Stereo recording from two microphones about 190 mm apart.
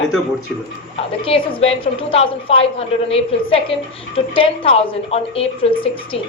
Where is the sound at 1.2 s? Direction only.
30° left (ahead or behind).